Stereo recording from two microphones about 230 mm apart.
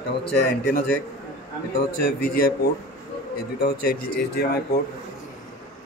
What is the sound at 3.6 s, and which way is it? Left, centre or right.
Speech, left.